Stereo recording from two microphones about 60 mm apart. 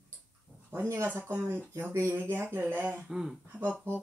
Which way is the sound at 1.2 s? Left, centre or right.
Right.